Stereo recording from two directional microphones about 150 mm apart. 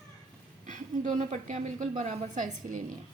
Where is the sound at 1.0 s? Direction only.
45° right (ahead or behind).